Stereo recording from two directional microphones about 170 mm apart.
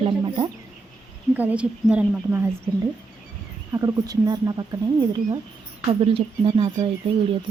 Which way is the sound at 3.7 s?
20° right (ahead or behind).